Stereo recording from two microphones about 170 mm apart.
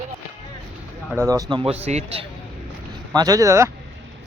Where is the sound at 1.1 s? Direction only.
15° right (ahead or behind); by 2.2 s 40° right (ahead or behind).